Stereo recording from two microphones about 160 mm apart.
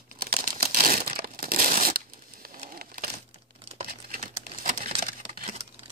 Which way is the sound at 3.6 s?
35° right (ahead or behind).